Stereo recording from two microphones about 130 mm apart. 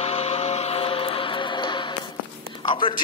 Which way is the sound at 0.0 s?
55° left (ahead or behind).